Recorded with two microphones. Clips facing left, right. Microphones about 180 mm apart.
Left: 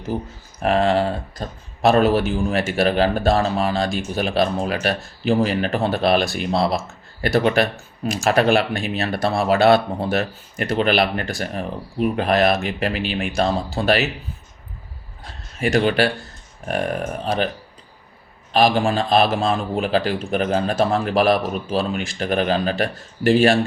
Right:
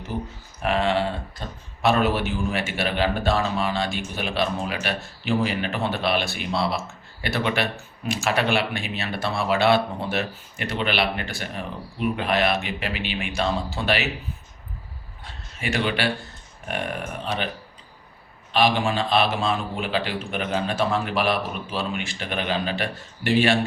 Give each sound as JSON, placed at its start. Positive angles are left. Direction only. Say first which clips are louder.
{"t": 0.6, "sound": "speech", "louder": "left 5 dB", "side_deg": 40}
{"t": 15.2, "sound": "a sound", "louder": "left 9 dB", "side_deg": 40}
{"t": 16.6, "sound": "speech", "louder": "left 6 dB", "side_deg": 40}
{"t": 18.5, "sound": "speech", "louder": "left 4 dB", "side_deg": 40}